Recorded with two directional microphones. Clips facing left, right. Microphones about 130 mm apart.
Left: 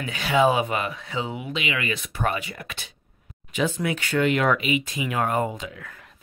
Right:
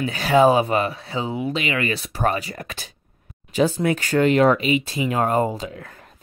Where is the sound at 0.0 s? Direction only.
40° right (ahead or behind).